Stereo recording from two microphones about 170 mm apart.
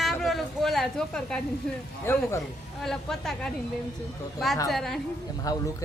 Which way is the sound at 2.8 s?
Centre (ahead or behind).